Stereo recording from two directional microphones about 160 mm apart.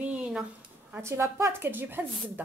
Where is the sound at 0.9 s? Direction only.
15° right (ahead or behind).